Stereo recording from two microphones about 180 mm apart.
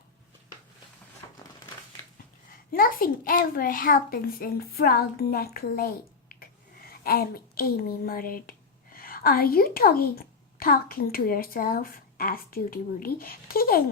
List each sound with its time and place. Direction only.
1.2 s crushing: 20° left (ahead or behind)
2.7 s a child's voice: 50° left (ahead or behind)